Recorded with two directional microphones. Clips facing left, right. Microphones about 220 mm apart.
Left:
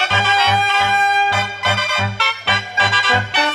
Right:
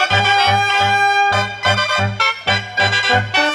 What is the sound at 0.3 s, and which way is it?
Music, 45° right (ahead or behind).